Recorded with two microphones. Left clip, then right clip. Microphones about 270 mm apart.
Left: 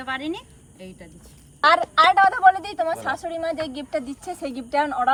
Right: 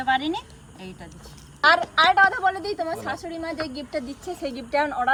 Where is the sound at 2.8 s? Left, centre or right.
Left.